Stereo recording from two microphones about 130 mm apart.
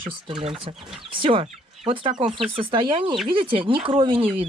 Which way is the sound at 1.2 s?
40° right (ahead or behind).